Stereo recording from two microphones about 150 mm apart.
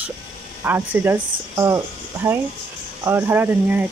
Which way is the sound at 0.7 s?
15° right (ahead or behind).